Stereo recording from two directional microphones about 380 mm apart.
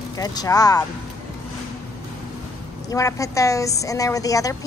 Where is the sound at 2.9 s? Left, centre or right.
Centre.